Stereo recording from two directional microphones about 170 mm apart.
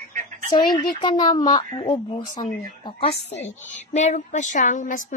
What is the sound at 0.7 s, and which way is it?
Speech, 25° left (ahead or behind).